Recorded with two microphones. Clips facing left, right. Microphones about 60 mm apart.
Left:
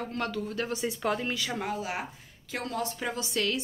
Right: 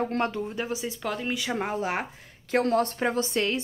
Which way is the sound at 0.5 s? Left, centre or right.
Centre.